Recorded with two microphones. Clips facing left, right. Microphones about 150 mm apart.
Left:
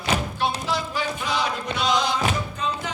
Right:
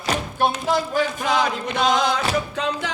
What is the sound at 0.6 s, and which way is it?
Music, 50° right (ahead or behind).